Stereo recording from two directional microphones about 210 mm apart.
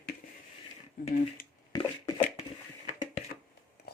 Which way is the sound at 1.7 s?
20° left (ahead or behind).